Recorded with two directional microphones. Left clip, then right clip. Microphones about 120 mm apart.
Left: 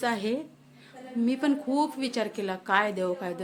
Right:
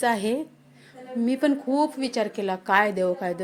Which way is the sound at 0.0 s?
25° right (ahead or behind).